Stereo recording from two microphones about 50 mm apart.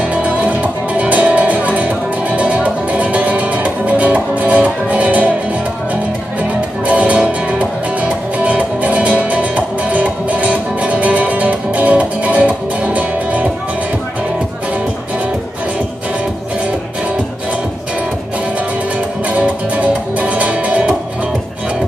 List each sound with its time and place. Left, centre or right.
0.1 s music: right
6.9 s music: right
19.3 s music: right